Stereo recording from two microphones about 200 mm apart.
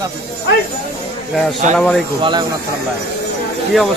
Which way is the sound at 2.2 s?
25° right (ahead or behind).